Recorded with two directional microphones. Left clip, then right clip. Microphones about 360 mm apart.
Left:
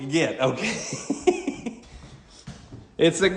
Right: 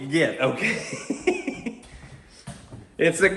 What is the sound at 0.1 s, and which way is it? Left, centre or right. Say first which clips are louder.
Speech: right 1 dB; centre.